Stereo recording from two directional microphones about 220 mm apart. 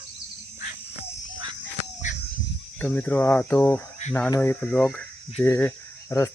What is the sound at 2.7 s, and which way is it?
Speech, 5° left (ahead or behind).